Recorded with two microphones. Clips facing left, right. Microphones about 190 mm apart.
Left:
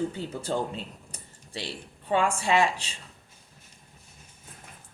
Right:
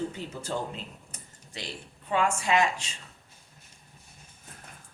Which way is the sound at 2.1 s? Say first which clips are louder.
Left 2 dB; 35° left (ahead or behind).